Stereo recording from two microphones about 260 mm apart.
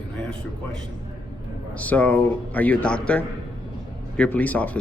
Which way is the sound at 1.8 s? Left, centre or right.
Centre.